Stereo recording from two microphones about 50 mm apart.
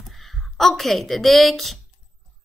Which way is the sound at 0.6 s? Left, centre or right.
Centre.